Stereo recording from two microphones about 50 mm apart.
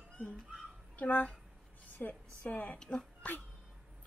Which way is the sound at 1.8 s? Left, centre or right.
Left.